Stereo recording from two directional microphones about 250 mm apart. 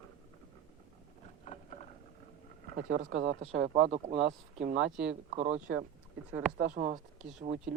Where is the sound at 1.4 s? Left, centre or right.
Left.